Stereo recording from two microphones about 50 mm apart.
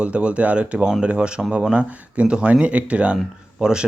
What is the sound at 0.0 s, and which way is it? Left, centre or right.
Speech, right.